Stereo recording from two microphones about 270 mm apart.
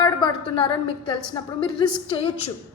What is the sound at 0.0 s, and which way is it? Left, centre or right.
A woman's voice, centre.